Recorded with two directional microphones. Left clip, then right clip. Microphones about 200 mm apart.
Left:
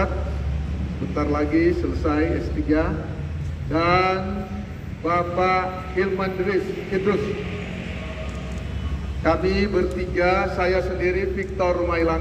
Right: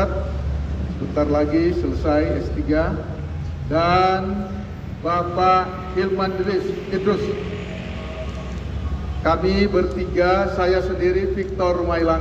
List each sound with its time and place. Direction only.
1.1 s a man's voice: 60° right (ahead or behind)
3.7 s a man's voice: 65° right (ahead or behind)
9.2 s a man's voice: 65° right (ahead or behind)